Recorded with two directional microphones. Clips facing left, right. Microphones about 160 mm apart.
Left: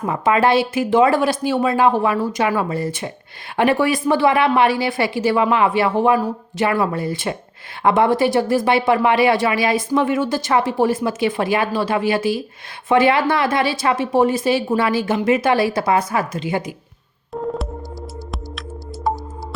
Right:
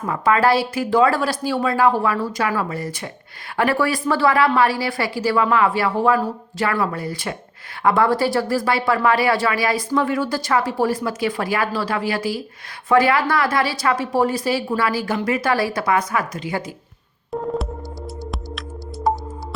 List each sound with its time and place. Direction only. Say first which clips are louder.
0.0 s speech: left 1 dB; 25° left (ahead or behind)
17.3 s music: even; centre (ahead or behind)